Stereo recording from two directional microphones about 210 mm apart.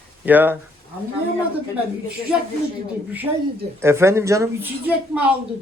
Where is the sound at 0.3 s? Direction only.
10° right (ahead or behind).